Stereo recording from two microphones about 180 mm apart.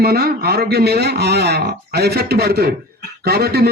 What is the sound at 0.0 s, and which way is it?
A man's voice, 60° right (ahead or behind).